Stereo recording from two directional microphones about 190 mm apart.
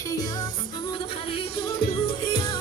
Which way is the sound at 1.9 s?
25° left (ahead or behind).